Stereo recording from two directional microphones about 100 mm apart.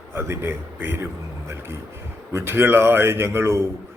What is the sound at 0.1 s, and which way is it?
A man's voice, 25° right (ahead or behind).